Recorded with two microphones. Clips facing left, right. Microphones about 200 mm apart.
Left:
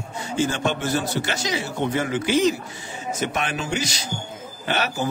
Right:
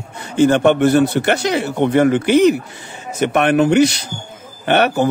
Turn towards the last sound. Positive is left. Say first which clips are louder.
# right 10 dB
turn(degrees=-60)  # may be behind; listen again after turning